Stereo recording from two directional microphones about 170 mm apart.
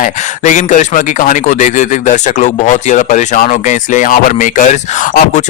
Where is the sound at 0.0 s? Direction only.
50° left (ahead or behind).